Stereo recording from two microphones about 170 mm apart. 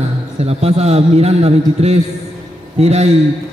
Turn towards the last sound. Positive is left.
turn(degrees=-40)  # may be behind; listen again after turning